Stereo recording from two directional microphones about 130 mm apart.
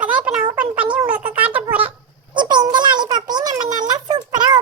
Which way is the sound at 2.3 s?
35° right (ahead or behind).